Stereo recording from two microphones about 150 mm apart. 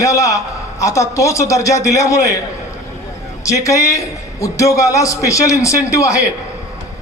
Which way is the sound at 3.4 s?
20° left (ahead or behind).